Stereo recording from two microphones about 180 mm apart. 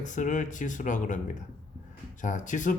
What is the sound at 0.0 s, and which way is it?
Speech, 45° left (ahead or behind).